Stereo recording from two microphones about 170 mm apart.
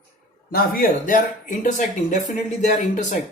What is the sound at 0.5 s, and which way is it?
Speech, 60° left (ahead or behind).